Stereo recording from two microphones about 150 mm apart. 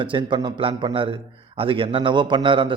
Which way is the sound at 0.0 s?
35° right (ahead or behind).